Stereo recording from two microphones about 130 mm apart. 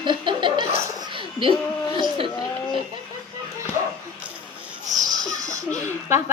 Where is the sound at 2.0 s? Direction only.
40° right (ahead or behind).